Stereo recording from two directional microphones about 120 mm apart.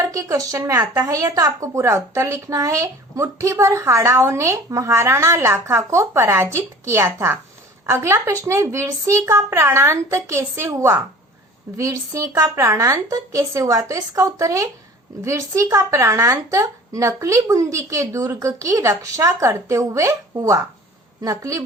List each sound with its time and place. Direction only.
0.0 s a woman's voice: 30° right (ahead or behind)